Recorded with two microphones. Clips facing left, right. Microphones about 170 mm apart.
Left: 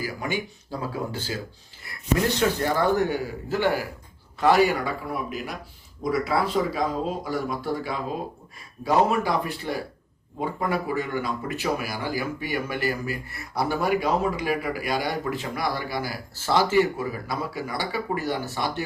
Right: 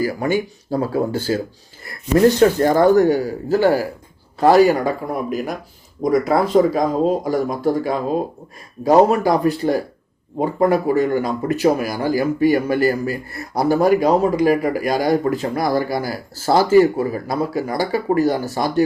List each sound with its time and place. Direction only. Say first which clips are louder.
0.0 s speech: right 10 dB; 45° right (ahead or behind)